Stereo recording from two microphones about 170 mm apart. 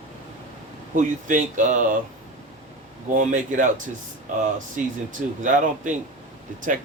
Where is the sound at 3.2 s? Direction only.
50° right (ahead or behind).